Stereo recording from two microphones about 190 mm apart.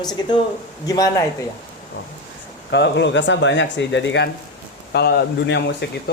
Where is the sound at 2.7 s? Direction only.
65° left (ahead or behind).